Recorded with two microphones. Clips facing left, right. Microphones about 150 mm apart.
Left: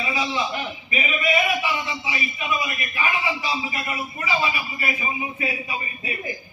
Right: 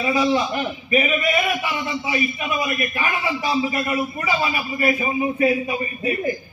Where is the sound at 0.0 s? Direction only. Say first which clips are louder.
Right 6 dB; 50° right (ahead or behind).